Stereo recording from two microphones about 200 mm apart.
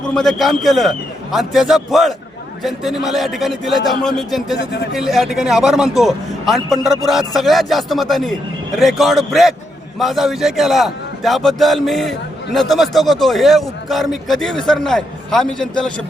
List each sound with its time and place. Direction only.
0.1 s a man's voice: centre (ahead or behind)
4.5 s speech: 55° left (ahead or behind)
4.9 s a man's voice: centre (ahead or behind)